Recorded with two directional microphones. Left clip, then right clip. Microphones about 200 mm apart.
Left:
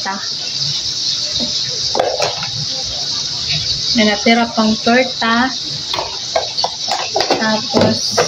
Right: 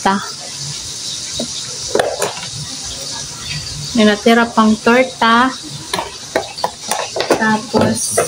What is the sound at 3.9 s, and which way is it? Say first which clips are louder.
Speech: right 2 dB; 60° right (ahead or behind).